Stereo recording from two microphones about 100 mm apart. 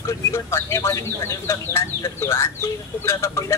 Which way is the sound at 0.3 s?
25° left (ahead or behind).